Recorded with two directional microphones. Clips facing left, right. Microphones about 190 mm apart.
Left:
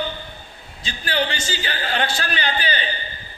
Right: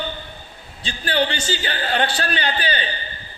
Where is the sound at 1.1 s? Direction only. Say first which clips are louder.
Right 3 dB; 30° right (ahead or behind).